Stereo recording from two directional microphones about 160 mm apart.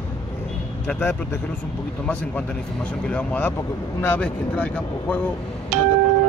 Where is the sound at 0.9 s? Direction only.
10° left (ahead or behind).